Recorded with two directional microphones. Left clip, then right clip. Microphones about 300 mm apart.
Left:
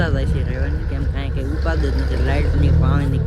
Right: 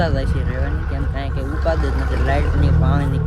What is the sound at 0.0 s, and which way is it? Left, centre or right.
Speech, centre.